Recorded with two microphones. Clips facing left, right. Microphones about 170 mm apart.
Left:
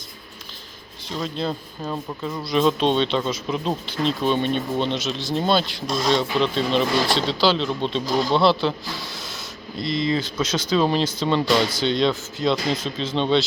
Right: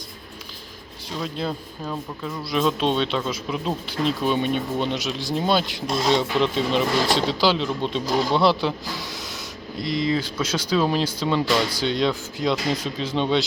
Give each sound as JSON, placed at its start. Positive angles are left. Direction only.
{"t": 1.2, "sound": "speech", "side_deg": -5}
{"t": 1.8, "sound": "speech", "side_deg": 5}
{"t": 2.4, "sound": "speech", "side_deg": -5}